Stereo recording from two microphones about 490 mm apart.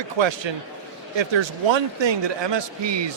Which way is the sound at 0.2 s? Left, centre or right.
Right.